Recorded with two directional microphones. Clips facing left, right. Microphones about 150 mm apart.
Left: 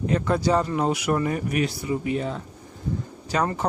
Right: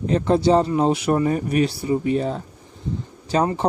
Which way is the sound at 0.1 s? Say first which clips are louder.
Right 6 dB; 30° right (ahead or behind).